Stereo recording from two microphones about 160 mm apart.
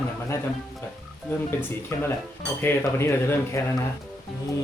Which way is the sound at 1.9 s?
15° left (ahead or behind).